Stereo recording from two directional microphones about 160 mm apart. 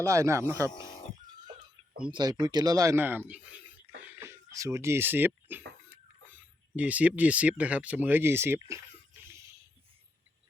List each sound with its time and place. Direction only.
0.0 s speech: 20° right (ahead or behind)
0.7 s speech: 25° left (ahead or behind)
2.0 s speech: 25° right (ahead or behind); by 5.6 s 10° right (ahead or behind)
5.9 s a sound: 15° right (ahead or behind)
6.7 s speech: 10° right (ahead or behind)